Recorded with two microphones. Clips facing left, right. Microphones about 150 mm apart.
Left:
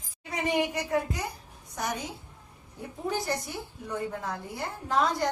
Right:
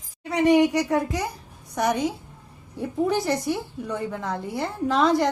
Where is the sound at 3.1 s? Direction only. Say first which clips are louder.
Right 3 dB; 80° right.